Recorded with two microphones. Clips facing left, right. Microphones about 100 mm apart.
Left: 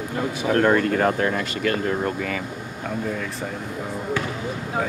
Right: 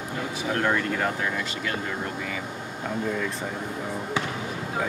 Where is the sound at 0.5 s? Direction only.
55° left (ahead or behind).